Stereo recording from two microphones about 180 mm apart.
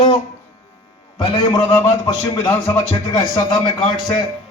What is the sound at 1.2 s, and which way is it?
Speech, 25° left (ahead or behind).